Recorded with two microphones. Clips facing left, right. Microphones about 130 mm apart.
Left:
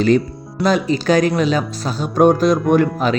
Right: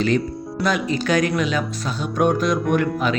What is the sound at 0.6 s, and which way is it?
Speech, 30° left (ahead or behind).